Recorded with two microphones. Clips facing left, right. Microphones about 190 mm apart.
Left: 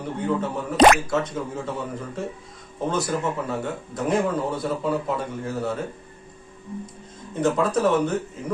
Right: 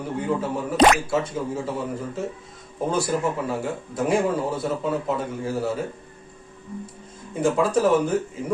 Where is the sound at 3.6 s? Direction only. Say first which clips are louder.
Right 2 dB; 10° right (ahead or behind).